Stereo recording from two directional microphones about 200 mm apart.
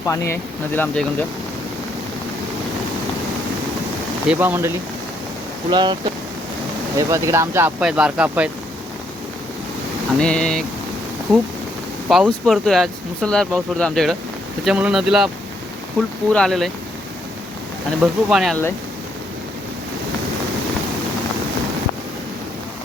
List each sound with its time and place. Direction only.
0.0 s speech: 15° left (ahead or behind)
4.3 s speech: 10° right (ahead or behind)
5.7 s speech: 20° right (ahead or behind)
7.1 s speech: 15° right (ahead or behind)
10.2 s speech: 5° left (ahead or behind)
12.0 s speech: centre (ahead or behind)
18.0 s speech: 5° right (ahead or behind)